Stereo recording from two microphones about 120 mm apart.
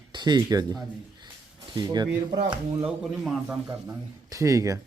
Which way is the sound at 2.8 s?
10° right (ahead or behind).